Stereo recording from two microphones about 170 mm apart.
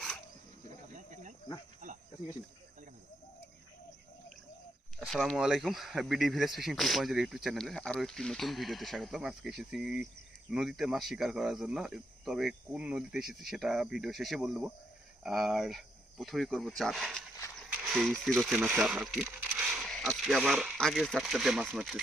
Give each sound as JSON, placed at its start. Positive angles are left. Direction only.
{"t": 0.9, "sound": "snake", "side_deg": -45}
{"t": 1.8, "sound": "cricket", "side_deg": -45}
{"t": 4.9, "sound": "speech", "side_deg": 0}